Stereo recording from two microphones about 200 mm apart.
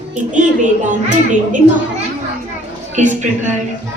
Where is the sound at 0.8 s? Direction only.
40° right (ahead or behind).